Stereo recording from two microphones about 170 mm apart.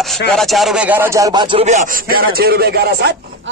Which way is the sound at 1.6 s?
40° right (ahead or behind).